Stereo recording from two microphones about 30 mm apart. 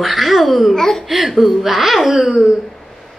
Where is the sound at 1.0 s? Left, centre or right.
Centre.